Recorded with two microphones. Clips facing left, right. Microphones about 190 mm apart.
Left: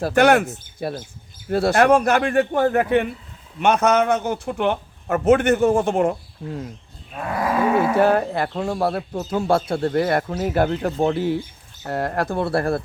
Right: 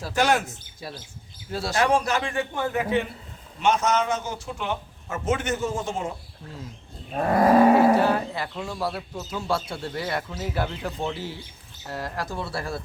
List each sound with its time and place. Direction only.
0.0 s speech: 60° left (ahead or behind)
7.1 s cattle: 40° right (ahead or behind)
7.9 s speech: 55° left (ahead or behind)